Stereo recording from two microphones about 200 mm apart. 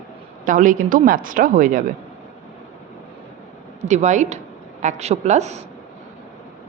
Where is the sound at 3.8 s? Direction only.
35° right (ahead or behind).